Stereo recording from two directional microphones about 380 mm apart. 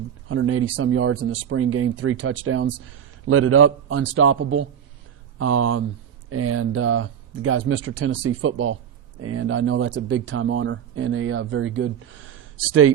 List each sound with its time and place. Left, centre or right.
0.3 s speech: right